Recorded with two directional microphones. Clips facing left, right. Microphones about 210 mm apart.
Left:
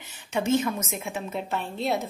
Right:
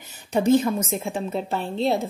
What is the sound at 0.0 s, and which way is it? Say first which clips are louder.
A woman's voice: right 6 dB; 40° right (ahead or behind).